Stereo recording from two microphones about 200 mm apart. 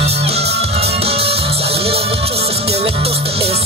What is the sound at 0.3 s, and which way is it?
Music, 30° right (ahead or behind).